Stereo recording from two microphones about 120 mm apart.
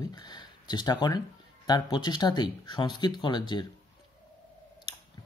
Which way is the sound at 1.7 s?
35° left (ahead or behind).